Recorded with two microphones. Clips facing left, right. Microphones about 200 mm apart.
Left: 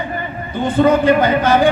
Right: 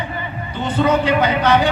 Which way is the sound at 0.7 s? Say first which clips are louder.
Left 4 dB; 50° left (ahead or behind).